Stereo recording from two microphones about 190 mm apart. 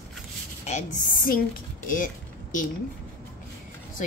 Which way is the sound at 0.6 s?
40° left (ahead or behind).